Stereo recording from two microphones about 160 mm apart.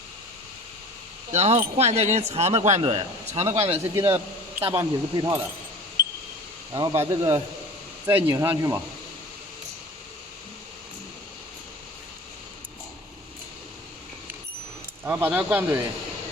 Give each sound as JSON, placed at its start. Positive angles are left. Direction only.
{"t": 1.3, "sound": "speech", "side_deg": -45}
{"t": 3.4, "sound": "speech", "side_deg": -15}
{"t": 6.7, "sound": "speech", "side_deg": -20}
{"t": 15.0, "sound": "speech", "side_deg": -10}